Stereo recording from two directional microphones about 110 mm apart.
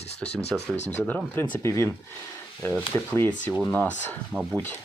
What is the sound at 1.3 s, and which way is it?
Speech, 20° left (ahead or behind).